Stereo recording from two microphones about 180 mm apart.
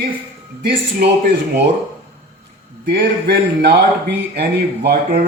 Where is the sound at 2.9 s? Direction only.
65° right (ahead or behind).